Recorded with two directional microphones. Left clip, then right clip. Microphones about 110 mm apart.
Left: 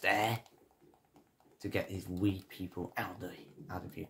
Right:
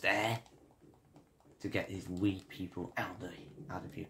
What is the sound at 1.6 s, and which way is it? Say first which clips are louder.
Speech: left 1 dB; 20° left (ahead or behind).